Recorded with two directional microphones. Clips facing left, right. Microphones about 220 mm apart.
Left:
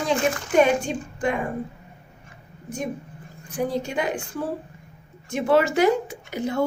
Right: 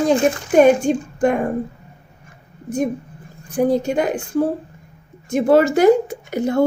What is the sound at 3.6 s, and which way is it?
Speech, 45° right (ahead or behind).